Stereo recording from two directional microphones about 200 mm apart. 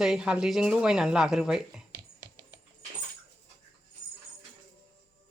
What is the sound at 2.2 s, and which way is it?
Music, 15° right (ahead or behind).